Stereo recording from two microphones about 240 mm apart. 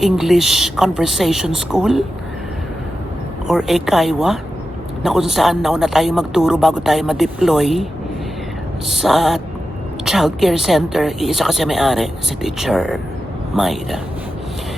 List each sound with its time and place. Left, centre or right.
0.0 s speech: centre
3.4 s speech: centre
8.9 s speech: centre